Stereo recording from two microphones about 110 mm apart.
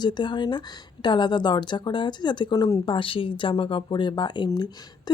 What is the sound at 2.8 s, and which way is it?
Speech, 50° left (ahead or behind).